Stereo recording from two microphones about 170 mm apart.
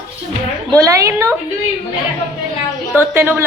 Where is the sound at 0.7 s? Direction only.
20° right (ahead or behind).